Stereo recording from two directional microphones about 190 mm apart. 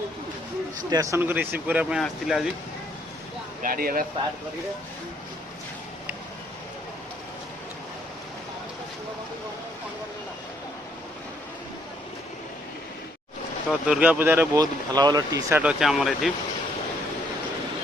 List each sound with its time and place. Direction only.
0.9 s speech: 15° right (ahead or behind); by 2.5 s centre (ahead or behind)
3.6 s speech: 50° right (ahead or behind)
13.7 s speech: 5° right (ahead or behind)